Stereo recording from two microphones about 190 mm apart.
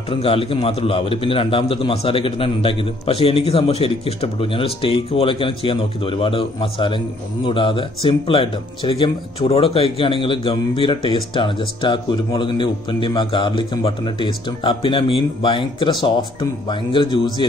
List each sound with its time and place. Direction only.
0.1 s speech: 30° left (ahead or behind)